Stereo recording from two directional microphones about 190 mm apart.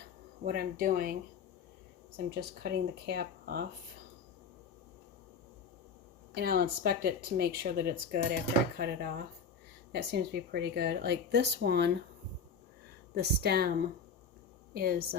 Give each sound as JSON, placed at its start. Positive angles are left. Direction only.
{"t": 0.4, "sound": "speech", "side_deg": -50}
{"t": 2.1, "sound": "speech", "side_deg": -55}
{"t": 6.3, "sound": "speech", "side_deg": -55}
{"t": 13.1, "sound": "a woman's voice", "side_deg": -55}